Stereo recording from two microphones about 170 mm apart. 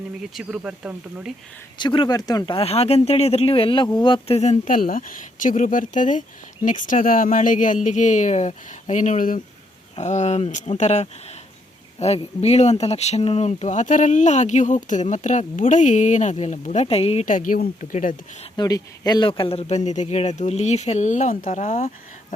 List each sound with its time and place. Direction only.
0.3 s speech: 5° right (ahead or behind)
1.8 s speech: 25° left (ahead or behind)
17.2 s speech: 50° left (ahead or behind)
18.5 s speech: 25° left (ahead or behind); by 21.9 s 50° left (ahead or behind)